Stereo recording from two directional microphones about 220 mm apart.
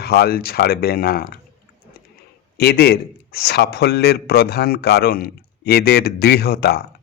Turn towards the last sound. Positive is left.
turn(degrees=45)  # may be behind; listen again after turning